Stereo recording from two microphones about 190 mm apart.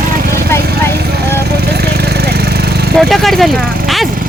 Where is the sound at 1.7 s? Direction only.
55° right (ahead or behind).